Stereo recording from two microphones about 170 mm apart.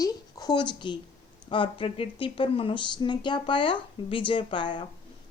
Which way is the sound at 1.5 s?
30° left (ahead or behind).